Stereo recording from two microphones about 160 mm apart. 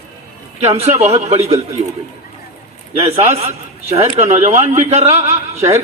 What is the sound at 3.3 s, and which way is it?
A man's voice, 40° right (ahead or behind).